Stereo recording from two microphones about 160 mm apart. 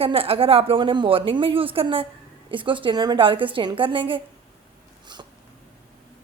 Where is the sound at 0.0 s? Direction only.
35° right (ahead or behind).